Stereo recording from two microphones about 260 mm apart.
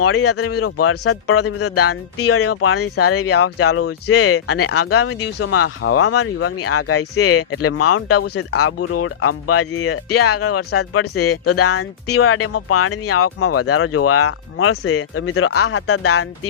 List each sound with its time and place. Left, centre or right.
0.0 s speech: left